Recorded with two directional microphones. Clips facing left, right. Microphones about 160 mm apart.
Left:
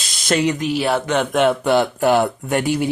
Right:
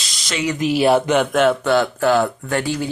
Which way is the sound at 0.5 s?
5° right (ahead or behind).